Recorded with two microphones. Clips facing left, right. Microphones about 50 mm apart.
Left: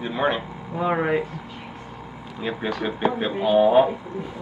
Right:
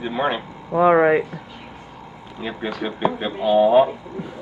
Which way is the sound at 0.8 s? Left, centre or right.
Right.